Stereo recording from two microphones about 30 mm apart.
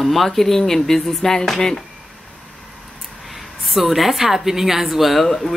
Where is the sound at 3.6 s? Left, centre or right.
Centre.